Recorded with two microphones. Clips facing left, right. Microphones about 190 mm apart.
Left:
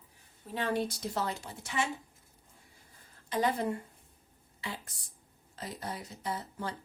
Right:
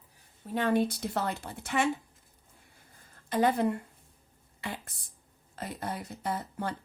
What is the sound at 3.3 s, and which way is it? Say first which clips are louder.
A woman's voice: right 4 dB; 55° right (ahead or behind).